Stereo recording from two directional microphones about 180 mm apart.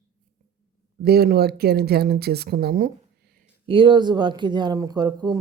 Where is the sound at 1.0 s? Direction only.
60° right (ahead or behind).